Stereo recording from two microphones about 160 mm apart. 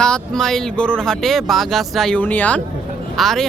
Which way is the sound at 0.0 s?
5° left (ahead or behind).